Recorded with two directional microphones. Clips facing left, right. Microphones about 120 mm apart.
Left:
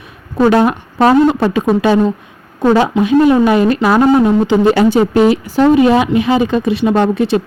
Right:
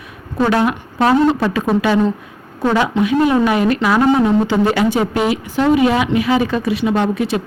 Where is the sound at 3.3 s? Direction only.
30° left (ahead or behind).